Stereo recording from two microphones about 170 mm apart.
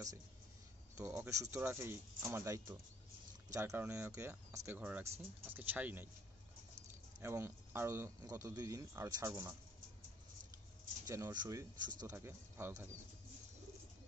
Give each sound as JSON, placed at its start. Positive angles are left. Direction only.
{"t": 0.9, "sound": "speech", "side_deg": -15}
{"t": 7.2, "sound": "speech", "side_deg": -15}
{"t": 11.1, "sound": "speech", "side_deg": -20}